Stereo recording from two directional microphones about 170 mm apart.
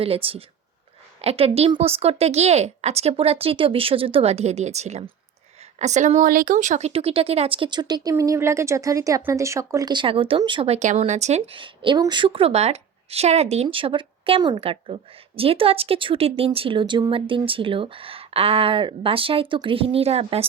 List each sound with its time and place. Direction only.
0.0 s speech: 35° right (ahead or behind)